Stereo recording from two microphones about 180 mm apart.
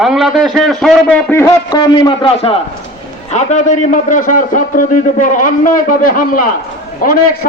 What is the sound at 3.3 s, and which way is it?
A man's voice, 45° left (ahead or behind).